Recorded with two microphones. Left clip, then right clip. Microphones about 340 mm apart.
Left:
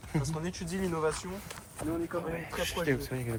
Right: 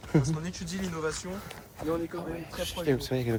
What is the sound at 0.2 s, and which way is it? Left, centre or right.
Speech, centre.